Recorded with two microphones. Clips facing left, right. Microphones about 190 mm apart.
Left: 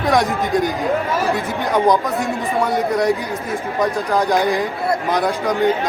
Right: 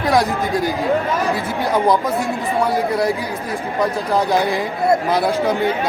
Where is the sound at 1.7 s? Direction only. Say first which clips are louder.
Left 1 dB; 5° right (ahead or behind).